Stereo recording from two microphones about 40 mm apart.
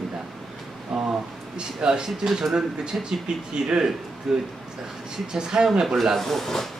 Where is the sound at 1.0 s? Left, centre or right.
Centre.